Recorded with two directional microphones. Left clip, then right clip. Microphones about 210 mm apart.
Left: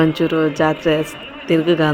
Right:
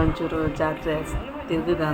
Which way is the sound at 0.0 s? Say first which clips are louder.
Left 9 dB; 40° left (ahead or behind).